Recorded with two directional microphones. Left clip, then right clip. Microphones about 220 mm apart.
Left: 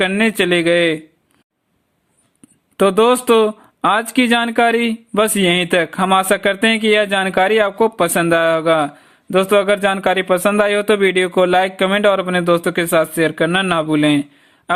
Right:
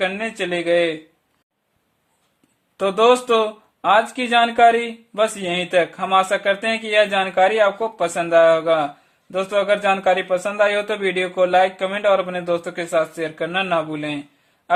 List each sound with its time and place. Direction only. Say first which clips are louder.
0.0 s speech: left 7 dB; 35° left (ahead or behind)
2.7 s speech: left 3 dB; 40° left (ahead or behind)